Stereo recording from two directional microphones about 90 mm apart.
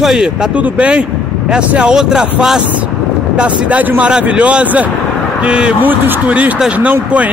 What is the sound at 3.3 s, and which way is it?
A man's voice, 10° right (ahead or behind).